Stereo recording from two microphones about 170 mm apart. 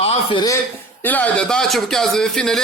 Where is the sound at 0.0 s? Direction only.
35° left (ahead or behind).